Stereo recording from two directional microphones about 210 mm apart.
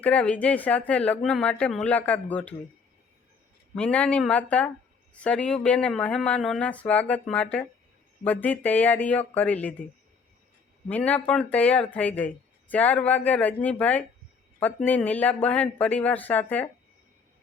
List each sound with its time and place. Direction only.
0.0 s speech: 5° left (ahead or behind)
3.8 s speech: 5° left (ahead or behind)
10.8 s speech: 5° left (ahead or behind)